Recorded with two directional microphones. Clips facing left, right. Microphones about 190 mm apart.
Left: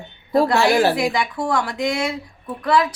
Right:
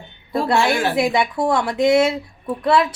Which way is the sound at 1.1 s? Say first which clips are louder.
Right 3 dB; 25° right (ahead or behind).